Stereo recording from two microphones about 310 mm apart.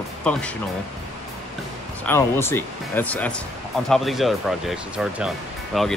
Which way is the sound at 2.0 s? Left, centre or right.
Centre.